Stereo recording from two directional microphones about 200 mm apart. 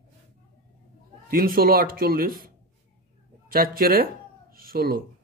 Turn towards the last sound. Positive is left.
turn(degrees=-45)  # may be behind; listen again after turning